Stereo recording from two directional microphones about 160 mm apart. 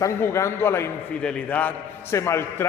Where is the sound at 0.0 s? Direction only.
15° left (ahead or behind).